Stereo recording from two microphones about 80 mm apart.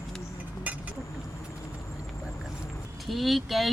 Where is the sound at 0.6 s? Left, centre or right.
Centre.